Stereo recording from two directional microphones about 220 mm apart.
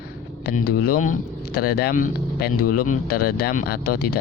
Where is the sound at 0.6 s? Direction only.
45° left (ahead or behind).